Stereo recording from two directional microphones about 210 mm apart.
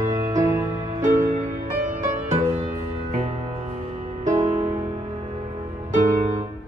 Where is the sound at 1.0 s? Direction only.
40° right (ahead or behind).